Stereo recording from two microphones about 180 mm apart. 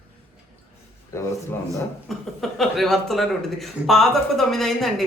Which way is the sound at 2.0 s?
Centre (ahead or behind).